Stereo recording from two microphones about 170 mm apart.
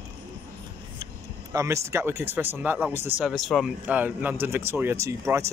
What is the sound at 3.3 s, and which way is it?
Speech, centre (ahead or behind).